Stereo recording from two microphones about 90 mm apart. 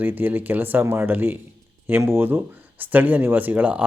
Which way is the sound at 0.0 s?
20° right (ahead or behind).